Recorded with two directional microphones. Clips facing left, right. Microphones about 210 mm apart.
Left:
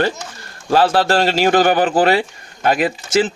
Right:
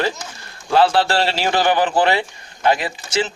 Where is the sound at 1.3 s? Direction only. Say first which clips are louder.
Left 5 dB; 50° left (ahead or behind).